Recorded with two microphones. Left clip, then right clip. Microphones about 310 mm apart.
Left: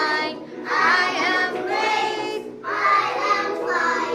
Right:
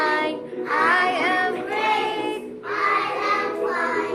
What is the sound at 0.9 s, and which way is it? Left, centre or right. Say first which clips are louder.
Music: left 1 dB; centre.